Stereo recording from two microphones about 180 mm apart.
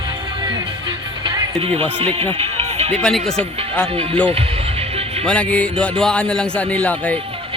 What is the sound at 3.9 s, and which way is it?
Speech, 30° right (ahead or behind).